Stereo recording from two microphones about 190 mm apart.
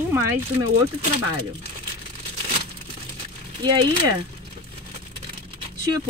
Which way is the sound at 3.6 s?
25° right (ahead or behind).